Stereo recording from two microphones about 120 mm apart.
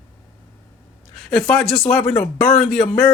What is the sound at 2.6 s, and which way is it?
Speech, 5° left (ahead or behind).